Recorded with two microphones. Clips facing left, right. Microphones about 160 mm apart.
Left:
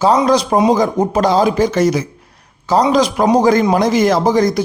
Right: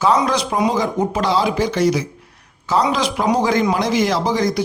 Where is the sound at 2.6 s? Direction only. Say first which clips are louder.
Left 5 dB; 40° left (ahead or behind).